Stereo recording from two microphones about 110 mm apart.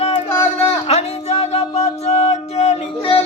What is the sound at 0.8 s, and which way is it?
Music, 80° left.